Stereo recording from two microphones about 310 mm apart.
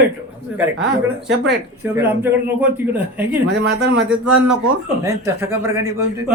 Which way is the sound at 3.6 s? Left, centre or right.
Right.